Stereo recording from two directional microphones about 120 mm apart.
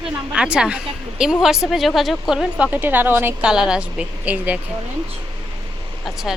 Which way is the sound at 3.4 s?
5° right (ahead or behind).